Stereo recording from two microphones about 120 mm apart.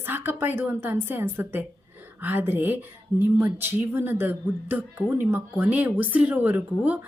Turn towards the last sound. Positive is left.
turn(degrees=-15)  # may be behind; listen again after turning